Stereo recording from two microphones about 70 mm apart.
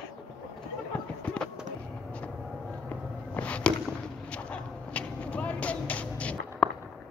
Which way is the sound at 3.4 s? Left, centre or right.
Centre.